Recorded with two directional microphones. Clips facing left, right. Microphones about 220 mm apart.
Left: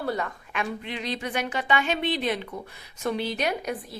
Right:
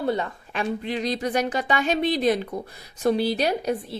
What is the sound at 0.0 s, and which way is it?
A woman's voice, 25° right (ahead or behind).